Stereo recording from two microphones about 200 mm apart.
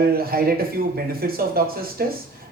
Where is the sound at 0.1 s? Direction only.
50° right (ahead or behind).